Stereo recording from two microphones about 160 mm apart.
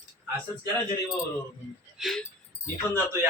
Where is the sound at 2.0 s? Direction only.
Centre (ahead or behind).